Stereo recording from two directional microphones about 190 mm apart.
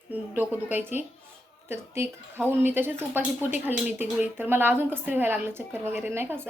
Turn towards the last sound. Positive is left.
turn(degrees=-10)  # may be behind; listen again after turning